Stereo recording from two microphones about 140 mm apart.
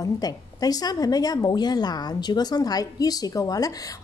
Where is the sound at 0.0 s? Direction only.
25° left (ahead or behind).